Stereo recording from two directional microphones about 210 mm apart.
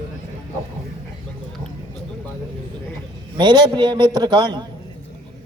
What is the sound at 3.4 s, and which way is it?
A man's voice, 20° right (ahead or behind).